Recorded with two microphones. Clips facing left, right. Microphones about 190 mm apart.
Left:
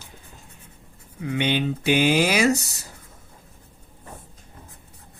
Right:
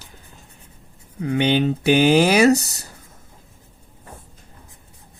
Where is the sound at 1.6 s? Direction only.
60° right (ahead or behind).